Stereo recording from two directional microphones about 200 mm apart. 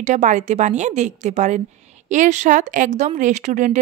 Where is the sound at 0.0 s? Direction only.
40° right (ahead or behind).